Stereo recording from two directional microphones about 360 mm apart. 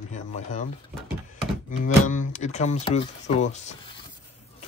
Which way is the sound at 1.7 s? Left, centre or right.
Centre.